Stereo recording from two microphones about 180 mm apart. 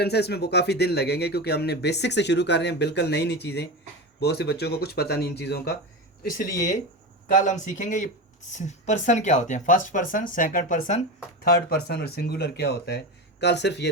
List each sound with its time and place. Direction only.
0.0 s speech: 65° left (ahead or behind)
7.3 s speech: 45° left (ahead or behind)
11.4 s speech: 60° left (ahead or behind)